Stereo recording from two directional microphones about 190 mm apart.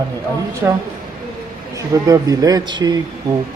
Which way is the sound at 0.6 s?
10° right (ahead or behind).